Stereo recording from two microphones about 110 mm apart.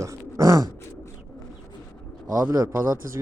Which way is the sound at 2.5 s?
30° right (ahead or behind).